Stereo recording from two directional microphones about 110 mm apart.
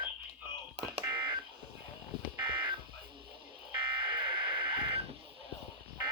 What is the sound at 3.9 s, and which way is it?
Buzzer, 50° right (ahead or behind).